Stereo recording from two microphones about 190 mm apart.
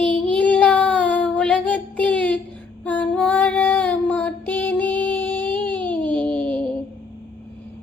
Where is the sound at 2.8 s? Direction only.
5° left (ahead or behind).